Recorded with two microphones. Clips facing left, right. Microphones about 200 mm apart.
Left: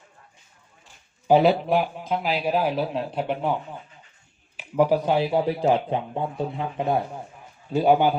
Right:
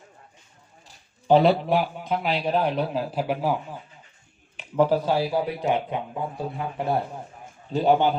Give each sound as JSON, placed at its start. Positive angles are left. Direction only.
{"t": 1.3, "sound": "a man's voice", "side_deg": 5}
{"t": 4.5, "sound": "a man's voice", "side_deg": 10}